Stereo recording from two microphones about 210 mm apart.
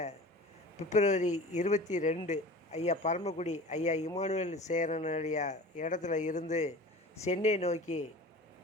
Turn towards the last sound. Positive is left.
turn(degrees=35)  # may be behind; listen again after turning